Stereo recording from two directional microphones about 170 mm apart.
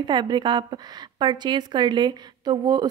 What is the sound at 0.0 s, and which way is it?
Speech, 25° right (ahead or behind).